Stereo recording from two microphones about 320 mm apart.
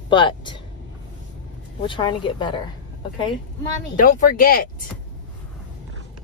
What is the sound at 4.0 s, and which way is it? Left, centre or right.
Speech, left.